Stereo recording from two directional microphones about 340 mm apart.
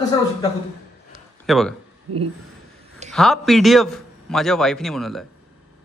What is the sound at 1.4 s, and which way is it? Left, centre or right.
Speech, centre.